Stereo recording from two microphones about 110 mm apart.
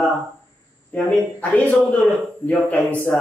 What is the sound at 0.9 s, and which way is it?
Speech, 10° left (ahead or behind).